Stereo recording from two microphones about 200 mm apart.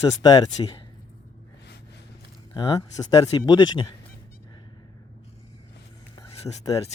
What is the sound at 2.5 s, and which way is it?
Speech, 20° left (ahead or behind).